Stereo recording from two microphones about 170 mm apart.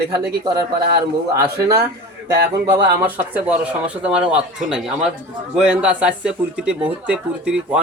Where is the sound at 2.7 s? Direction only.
10° right (ahead or behind).